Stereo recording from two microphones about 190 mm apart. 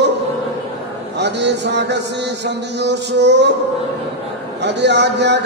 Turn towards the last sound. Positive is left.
turn(degrees=-65)  # may be behind; listen again after turning